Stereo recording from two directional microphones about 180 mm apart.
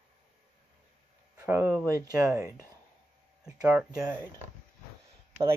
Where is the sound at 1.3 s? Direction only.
10° right (ahead or behind).